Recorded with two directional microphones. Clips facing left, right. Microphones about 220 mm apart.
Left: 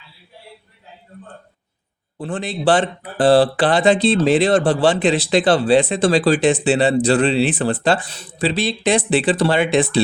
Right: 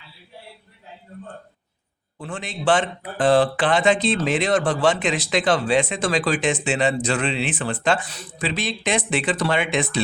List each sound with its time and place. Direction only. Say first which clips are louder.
2.1 s speech: left 7 dB; 35° left (ahead or behind)